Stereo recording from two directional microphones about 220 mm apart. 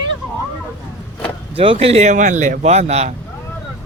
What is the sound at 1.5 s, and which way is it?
Speech, 25° right (ahead or behind).